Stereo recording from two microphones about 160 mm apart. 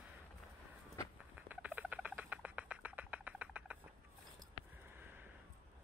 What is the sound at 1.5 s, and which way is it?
Rodents, 10° right (ahead or behind).